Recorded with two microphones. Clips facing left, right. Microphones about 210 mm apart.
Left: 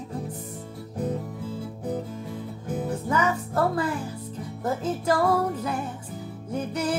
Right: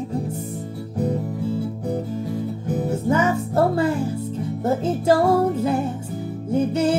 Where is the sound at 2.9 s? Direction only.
25° right (ahead or behind).